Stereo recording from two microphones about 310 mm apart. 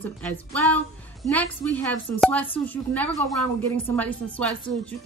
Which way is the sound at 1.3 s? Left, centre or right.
Centre.